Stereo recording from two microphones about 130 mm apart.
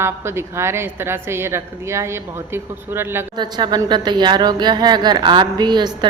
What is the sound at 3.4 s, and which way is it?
A woman's voice, 35° right (ahead or behind).